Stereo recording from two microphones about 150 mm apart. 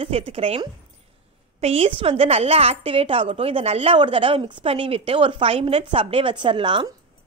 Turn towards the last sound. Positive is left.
turn(degrees=-30)  # may be behind; listen again after turning